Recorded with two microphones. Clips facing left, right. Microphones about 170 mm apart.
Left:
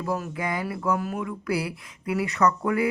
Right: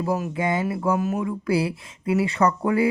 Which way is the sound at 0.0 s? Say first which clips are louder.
Right 4 dB; 20° right (ahead or behind).